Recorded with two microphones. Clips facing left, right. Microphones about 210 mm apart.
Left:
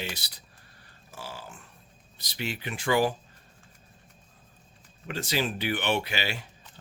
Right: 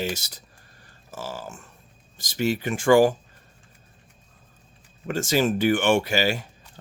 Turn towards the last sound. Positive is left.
turn(degrees=-45)  # may be behind; listen again after turning